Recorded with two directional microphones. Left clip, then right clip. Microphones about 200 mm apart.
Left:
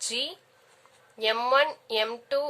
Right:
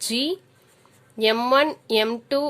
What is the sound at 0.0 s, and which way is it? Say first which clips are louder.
Speech: right 6 dB; 35° right (ahead or behind).